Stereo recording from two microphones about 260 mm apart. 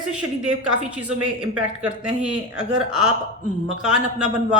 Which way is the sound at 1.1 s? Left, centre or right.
Right.